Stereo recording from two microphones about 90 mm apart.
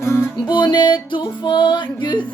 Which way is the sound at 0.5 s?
55° left (ahead or behind).